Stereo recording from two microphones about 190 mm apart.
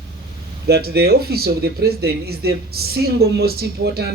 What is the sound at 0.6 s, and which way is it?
Speech, 55° right (ahead or behind).